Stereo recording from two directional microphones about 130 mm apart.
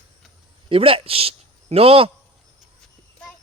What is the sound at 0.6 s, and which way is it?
Speech, 45° right (ahead or behind).